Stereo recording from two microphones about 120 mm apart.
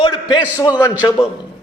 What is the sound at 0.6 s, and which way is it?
Speech, 30° left (ahead or behind).